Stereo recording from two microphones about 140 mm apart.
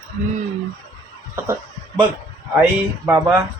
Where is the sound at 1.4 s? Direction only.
15° right (ahead or behind).